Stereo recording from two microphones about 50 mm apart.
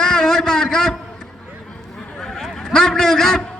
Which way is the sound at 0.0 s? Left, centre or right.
Centre.